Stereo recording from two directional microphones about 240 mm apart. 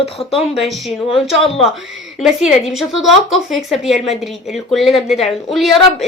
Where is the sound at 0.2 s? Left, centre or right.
Left.